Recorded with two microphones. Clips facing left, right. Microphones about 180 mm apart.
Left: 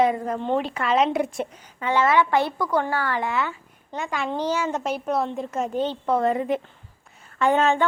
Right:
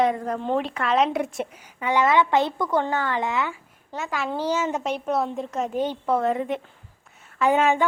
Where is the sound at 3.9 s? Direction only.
Centre (ahead or behind).